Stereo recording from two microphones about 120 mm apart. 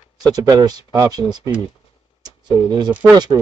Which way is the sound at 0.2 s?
35° right (ahead or behind).